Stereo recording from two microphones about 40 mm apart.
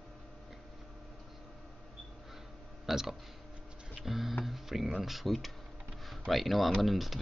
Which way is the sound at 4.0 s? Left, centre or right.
Centre.